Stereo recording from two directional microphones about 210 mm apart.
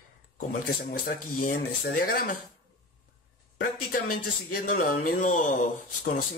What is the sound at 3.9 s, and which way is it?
A man's voice, 45° left (ahead or behind).